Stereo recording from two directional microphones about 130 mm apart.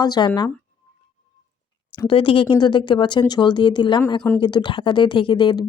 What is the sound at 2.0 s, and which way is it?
Speech, 40° left (ahead or behind).